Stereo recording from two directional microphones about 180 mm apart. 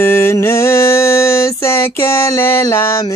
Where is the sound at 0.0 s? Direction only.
15° left (ahead or behind).